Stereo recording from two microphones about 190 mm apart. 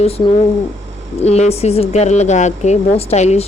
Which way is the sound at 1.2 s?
35° left (ahead or behind).